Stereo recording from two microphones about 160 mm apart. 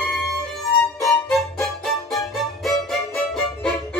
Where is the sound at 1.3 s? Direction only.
Centre (ahead or behind).